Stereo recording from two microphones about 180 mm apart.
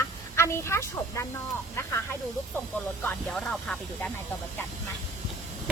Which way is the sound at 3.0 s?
5° left (ahead or behind).